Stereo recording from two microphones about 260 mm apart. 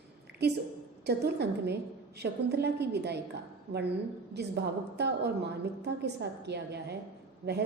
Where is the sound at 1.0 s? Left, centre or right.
Right.